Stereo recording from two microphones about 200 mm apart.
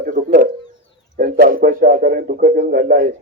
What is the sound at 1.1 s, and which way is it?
A man's voice, 45° right (ahead or behind).